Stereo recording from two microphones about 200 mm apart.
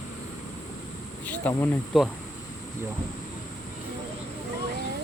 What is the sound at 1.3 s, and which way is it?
Speech, 5° left (ahead or behind).